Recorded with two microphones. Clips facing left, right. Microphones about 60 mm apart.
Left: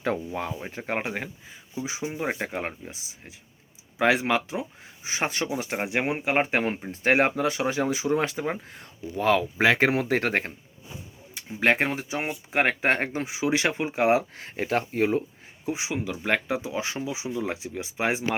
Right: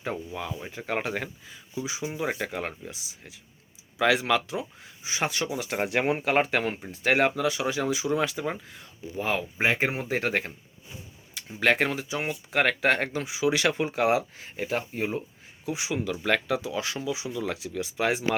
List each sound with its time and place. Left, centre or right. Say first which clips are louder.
0.3 s speech: left 4 dB; left
0.5 s speech: left 1 dB; left
1.7 s speech: left 1 dB; left; by 6.3 s centre
6.3 s speech: even; left
8.7 s speech: left 2 dB; left
11.3 s speech: left 1 dB; left
14.3 s speech: left 3 dB; left
15.6 s speech: even; left